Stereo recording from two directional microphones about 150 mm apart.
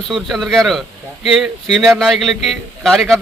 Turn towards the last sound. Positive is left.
turn(degrees=0)  # may be behind; listen again after turning